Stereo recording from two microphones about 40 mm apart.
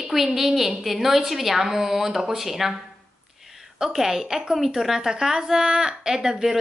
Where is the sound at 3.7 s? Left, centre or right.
Centre.